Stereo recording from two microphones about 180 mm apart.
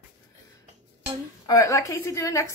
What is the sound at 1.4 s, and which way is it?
A woman's voice, 20° left (ahead or behind).